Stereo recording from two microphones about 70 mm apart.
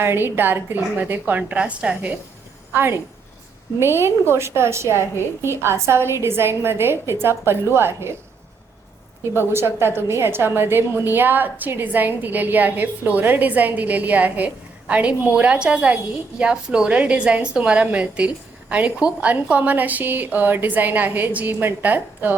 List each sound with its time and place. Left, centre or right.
0.0 s a woman's voice: right; by 2.1 s centre
3.8 s a woman's voice: right
9.4 s a woman's voice: right